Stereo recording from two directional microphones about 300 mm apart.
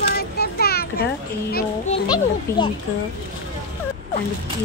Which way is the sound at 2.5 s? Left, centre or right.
Centre.